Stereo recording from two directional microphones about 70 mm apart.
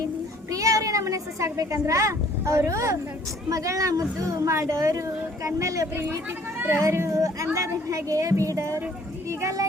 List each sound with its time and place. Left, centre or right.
0.5 s speech: right
6.6 s speech: right
7.1 s speech: right